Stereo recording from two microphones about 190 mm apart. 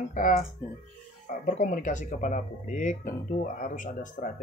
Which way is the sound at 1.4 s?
45° left (ahead or behind).